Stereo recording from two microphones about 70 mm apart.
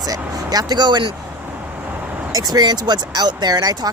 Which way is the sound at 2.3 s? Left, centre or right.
Right.